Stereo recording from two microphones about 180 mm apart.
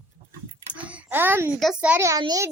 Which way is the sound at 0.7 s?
5° right (ahead or behind).